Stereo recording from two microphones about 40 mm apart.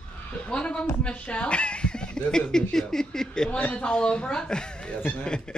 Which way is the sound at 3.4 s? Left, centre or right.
Left.